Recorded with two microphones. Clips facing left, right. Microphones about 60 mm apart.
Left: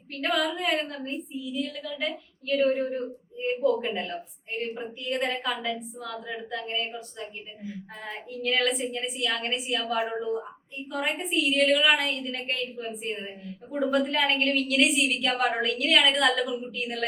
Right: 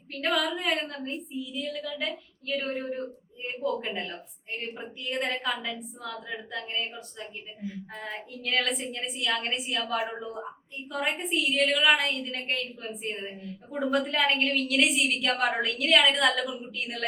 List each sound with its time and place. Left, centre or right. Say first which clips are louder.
0.2 s a woman's voice: left 1 dB; centre